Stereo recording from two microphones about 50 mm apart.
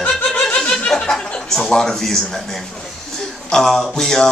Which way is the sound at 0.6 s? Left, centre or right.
Centre.